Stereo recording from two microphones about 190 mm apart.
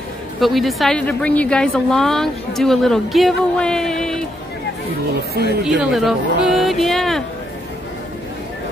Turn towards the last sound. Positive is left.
turn(degrees=0)  # may be behind; listen again after turning